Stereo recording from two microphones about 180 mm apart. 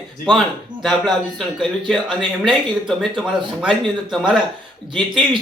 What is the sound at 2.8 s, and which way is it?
Speech, centre (ahead or behind).